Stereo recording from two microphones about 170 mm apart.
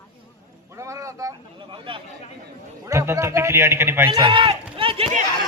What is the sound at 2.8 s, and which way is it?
A man's voice, 15° right (ahead or behind).